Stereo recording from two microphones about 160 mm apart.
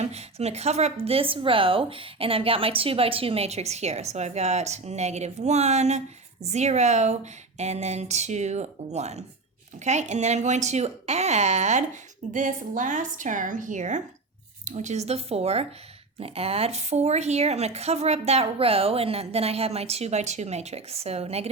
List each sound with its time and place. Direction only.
0.0 s a woman's voice: 40° right (ahead or behind)